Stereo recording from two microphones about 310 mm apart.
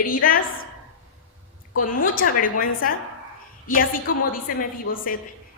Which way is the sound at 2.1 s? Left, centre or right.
Left.